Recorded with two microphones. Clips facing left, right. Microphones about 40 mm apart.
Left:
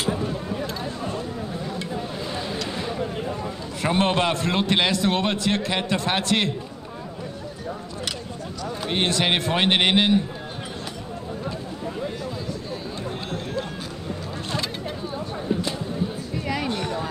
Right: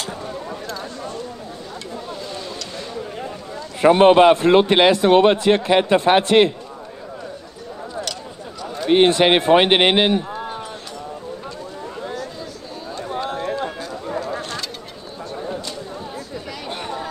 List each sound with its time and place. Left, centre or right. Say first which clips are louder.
0.0 s a sound: left 3 dB; centre
3.8 s a man's voice: right 11 dB; right
8.9 s a man's voice: right 9 dB; right
13.3 s run: right 6 dB; centre